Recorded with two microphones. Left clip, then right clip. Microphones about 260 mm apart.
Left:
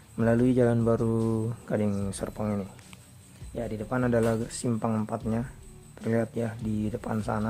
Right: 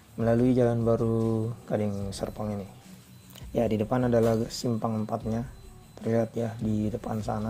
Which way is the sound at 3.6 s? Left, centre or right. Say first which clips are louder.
Right 4 dB; centre.